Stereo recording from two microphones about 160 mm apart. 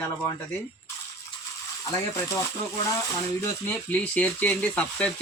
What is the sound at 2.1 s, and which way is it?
Speech, 20° left (ahead or behind).